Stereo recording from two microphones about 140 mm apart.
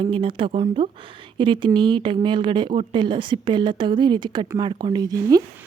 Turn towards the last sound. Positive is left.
turn(degrees=-25)  # may be behind; listen again after turning